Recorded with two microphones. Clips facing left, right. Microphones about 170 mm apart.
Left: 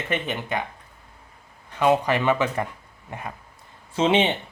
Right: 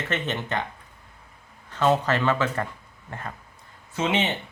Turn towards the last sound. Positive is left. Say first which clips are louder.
# left 5 dB
turn(degrees=30)  # may be behind; listen again after turning